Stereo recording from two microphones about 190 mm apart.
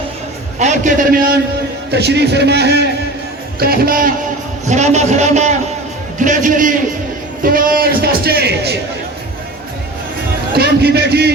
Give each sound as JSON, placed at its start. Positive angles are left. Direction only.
{"t": 0.6, "sound": "a man's voice", "side_deg": -45}
{"t": 4.6, "sound": "a man's voice", "side_deg": -35}
{"t": 10.5, "sound": "a man's voice", "side_deg": -55}